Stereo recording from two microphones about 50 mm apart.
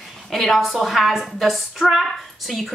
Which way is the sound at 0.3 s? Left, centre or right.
Centre.